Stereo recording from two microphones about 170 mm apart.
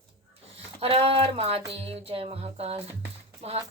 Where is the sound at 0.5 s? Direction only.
35° right (ahead or behind).